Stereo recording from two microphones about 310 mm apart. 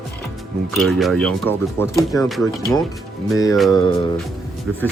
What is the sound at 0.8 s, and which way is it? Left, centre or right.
Speech, centre.